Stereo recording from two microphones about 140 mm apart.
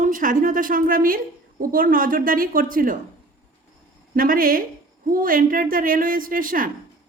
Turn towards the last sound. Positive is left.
turn(degrees=-80)